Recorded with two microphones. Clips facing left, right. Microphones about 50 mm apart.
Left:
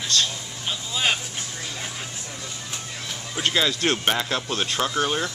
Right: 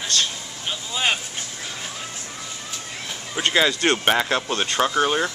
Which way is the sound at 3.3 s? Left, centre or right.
Centre.